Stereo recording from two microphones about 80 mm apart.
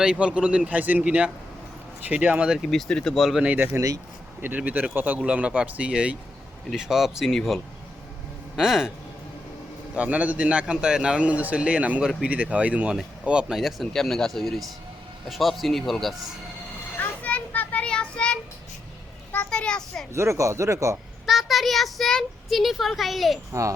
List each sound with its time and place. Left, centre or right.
0.0 s a man's voice: centre
2.6 s a child's voice: centre
3.4 s speech: centre
3.8 s speech: right
4.4 s a child's voice: right; by 8.9 s centre
9.9 s a man's voice: centre
13.6 s a child's voice: centre
17.0 s child singing: centre
19.5 s a child's voice: centre
20.1 s speech: right
21.2 s a child's voice: centre
23.5 s speech: right